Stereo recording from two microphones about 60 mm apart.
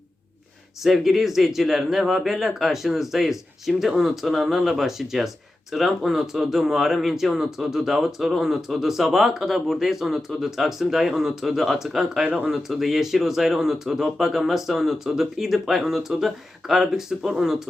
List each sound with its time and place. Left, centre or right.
0.8 s speech: centre